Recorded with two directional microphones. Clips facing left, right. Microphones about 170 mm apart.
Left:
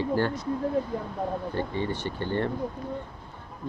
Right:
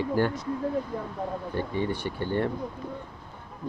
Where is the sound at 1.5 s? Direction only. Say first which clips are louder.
Right 1 dB; 15° right (ahead or behind).